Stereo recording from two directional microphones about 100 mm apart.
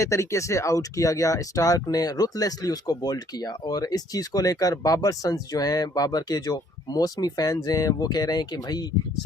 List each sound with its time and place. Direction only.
0.0 s speech: 30° left (ahead or behind)